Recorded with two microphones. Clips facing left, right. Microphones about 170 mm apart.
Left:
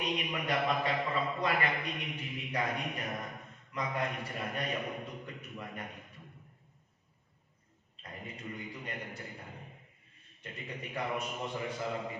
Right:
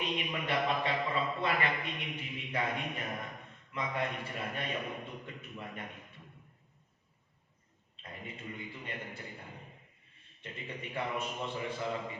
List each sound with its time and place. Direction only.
0.0 s a man's voice: 40° left (ahead or behind)
8.0 s a man's voice: 40° left (ahead or behind)
10.4 s a man's voice: 40° left (ahead or behind)